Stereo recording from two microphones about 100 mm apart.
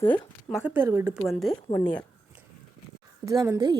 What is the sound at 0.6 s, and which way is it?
Speech, 20° right (ahead or behind).